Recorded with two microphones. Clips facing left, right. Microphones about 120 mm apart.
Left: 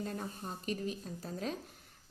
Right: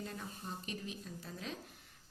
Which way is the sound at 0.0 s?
45° left (ahead or behind).